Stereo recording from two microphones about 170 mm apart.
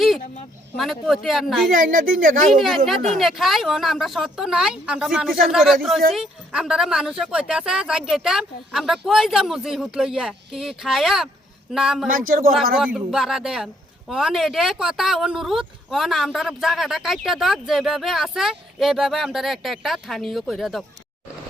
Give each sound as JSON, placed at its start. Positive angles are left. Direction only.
{"t": 0.8, "sound": "speech", "side_deg": 0}
{"t": 1.7, "sound": "a woman's voice", "side_deg": -55}
{"t": 2.5, "sound": "speech", "side_deg": 0}
{"t": 12.0, "sound": "speech", "side_deg": -55}
{"t": 12.8, "sound": "speech", "side_deg": -5}